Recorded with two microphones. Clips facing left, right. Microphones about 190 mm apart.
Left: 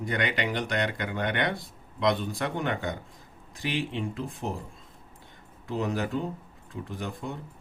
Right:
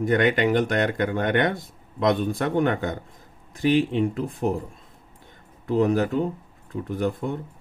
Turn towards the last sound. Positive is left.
turn(degrees=-55)  # may be behind; listen again after turning